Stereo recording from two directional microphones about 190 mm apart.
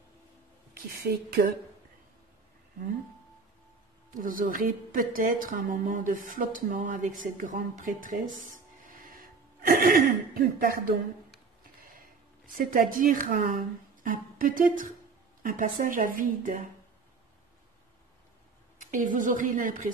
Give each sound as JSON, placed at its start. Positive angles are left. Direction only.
{"t": 1.0, "sound": "a woman's voice", "side_deg": -50}
{"t": 4.1, "sound": "a woman's voice", "side_deg": -45}
{"t": 8.8, "sound": "a sound", "side_deg": -45}
{"t": 12.5, "sound": "a woman's voice", "side_deg": -45}
{"t": 18.8, "sound": "a woman's voice", "side_deg": -40}